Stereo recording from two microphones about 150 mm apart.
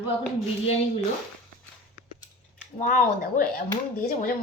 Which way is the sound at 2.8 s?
65° left (ahead or behind).